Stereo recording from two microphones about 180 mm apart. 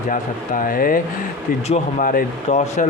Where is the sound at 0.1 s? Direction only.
50° left (ahead or behind).